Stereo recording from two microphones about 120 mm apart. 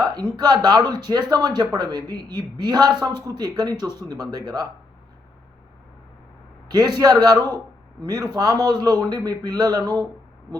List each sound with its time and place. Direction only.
0.0 s speech: 35° right (ahead or behind)
6.7 s speech: 35° right (ahead or behind)